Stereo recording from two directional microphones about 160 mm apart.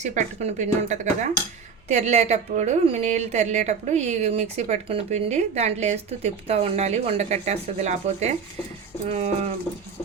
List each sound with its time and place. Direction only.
0.0 s a woman's voice: 50° right (ahead or behind)